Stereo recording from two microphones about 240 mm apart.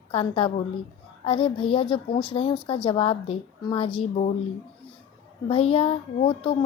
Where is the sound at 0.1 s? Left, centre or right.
Left.